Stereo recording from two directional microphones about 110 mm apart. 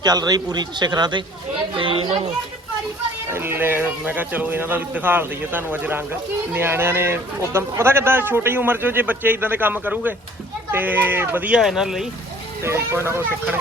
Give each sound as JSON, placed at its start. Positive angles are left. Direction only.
{"t": 0.0, "sound": "a man's voice", "side_deg": -35}
{"t": 1.7, "sound": "speech", "side_deg": -50}
{"t": 3.2, "sound": "speech", "side_deg": -20}
{"t": 11.6, "sound": "speech", "side_deg": -5}
{"t": 12.6, "sound": "speech", "side_deg": -25}